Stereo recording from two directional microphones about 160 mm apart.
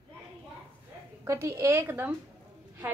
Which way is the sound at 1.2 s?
15° right (ahead or behind).